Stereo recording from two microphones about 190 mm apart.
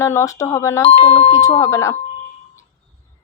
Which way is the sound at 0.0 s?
15° left (ahead or behind).